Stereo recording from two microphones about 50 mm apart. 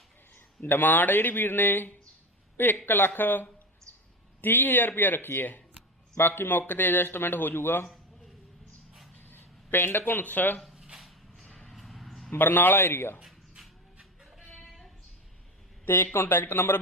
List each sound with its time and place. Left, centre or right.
0.6 s a man's voice: left
9.2 s a sound: left
10.2 s a man's voice: left
10.6 s a sound: centre
11.4 s vehicle: centre
11.7 s vehicle: centre
12.3 s a man's voice: left
14.5 s a sound: centre
15.8 s speech: left